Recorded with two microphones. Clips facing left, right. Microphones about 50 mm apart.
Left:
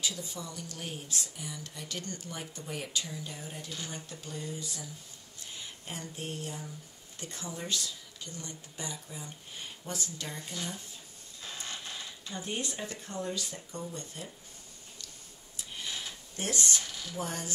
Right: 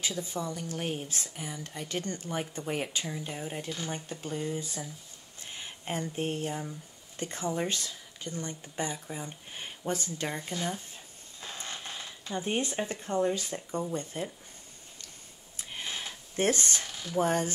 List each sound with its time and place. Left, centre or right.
0.0 s speech: right
12.3 s speech: right
15.5 s a sound: right